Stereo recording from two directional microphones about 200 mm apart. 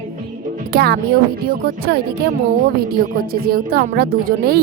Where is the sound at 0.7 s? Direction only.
50° right (ahead or behind).